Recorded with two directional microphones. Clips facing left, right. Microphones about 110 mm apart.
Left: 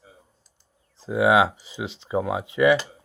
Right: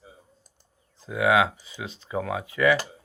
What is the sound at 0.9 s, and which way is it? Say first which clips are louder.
Speech: left 3 dB; 30° left (ahead or behind).